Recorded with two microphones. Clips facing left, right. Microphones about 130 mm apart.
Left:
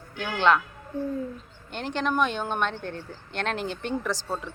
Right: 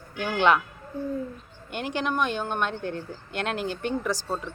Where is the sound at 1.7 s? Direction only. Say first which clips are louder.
Left 1 dB; 10° right (ahead or behind).